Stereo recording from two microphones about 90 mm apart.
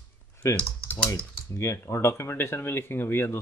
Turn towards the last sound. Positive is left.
turn(degrees=25)  # may be behind; listen again after turning